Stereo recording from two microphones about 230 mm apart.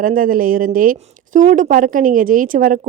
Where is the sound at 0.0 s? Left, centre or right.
Right.